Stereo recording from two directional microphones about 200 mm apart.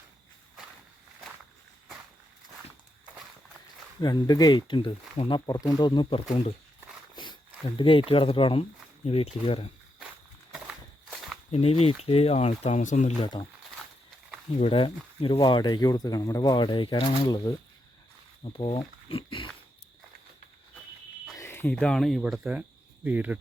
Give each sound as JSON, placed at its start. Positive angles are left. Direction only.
{"t": 4.0, "sound": "speech", "side_deg": 20}
{"t": 7.8, "sound": "speech", "side_deg": 25}
{"t": 11.5, "sound": "speech", "side_deg": 30}
{"t": 13.2, "sound": "speech", "side_deg": 20}
{"t": 14.6, "sound": "speech", "side_deg": 30}
{"t": 21.3, "sound": "speech", "side_deg": 10}